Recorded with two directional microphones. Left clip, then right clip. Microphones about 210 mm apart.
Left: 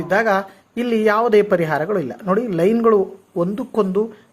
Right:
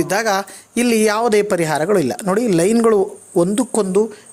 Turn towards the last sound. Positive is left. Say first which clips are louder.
# right 3 dB
turn(degrees=-35)  # may be behind; listen again after turning